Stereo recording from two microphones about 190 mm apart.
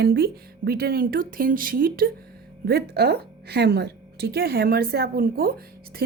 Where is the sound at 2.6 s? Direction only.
60° right (ahead or behind).